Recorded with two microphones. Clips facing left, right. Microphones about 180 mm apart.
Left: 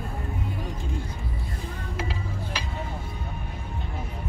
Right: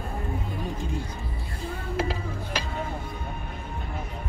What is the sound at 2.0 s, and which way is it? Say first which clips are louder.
Music: right 4 dB; 40° right (ahead or behind).